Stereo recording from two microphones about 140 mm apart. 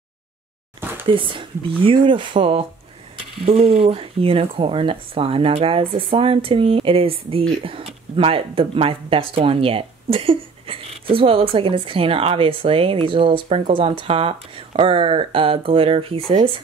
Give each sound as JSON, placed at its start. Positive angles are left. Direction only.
{"t": 1.0, "sound": "speech", "side_deg": -40}